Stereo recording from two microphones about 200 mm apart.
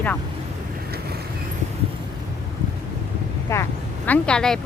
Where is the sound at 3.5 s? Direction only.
10° left (ahead or behind).